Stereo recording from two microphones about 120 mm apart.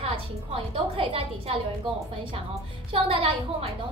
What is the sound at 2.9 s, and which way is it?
Speech, 50° right (ahead or behind).